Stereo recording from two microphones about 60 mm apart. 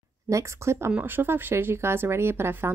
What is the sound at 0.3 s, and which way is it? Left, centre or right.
Speech, right.